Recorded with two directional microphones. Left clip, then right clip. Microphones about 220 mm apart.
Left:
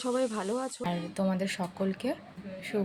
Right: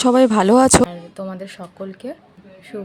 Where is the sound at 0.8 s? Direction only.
20° right (ahead or behind).